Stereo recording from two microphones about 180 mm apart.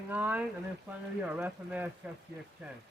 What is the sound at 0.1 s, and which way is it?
Speech, 10° right (ahead or behind).